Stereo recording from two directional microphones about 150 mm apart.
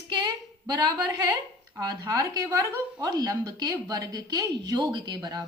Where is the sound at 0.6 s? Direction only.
30° right (ahead or behind).